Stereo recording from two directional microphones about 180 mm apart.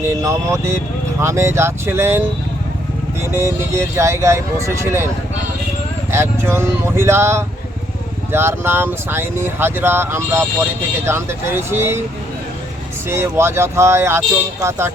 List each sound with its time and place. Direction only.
0.0 s speech: 15° right (ahead or behind)
6.1 s speech: 15° right (ahead or behind)
13.1 s speech: 15° right (ahead or behind)